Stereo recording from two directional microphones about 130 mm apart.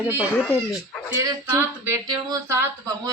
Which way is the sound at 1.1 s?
20° right (ahead or behind).